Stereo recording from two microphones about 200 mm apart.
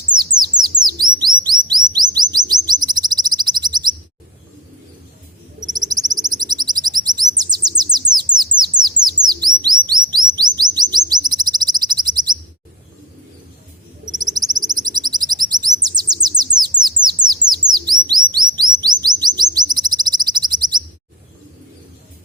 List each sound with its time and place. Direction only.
0.3 s bird: 20° right (ahead or behind)
1.5 s chirp: 20° right (ahead or behind)
1.9 s bird: 20° right (ahead or behind)
5.6 s bird: 20° right (ahead or behind)
9.2 s bird: 20° right (ahead or behind)
9.9 s chirp: 20° right (ahead or behind)
14.1 s bird: 20° right (ahead or behind)
18.3 s chirp: 20° right (ahead or behind)
18.8 s bird: 20° right (ahead or behind)